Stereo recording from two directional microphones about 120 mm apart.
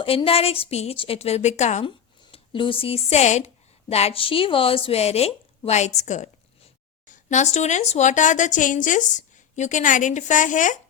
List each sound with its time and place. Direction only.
0.0 s speech: 50° left (ahead or behind); by 1.8 s 75° left (ahead or behind)
2.3 s speech: 45° left (ahead or behind); by 6.3 s 75° left (ahead or behind)
7.1 s a woman's voice: 85° left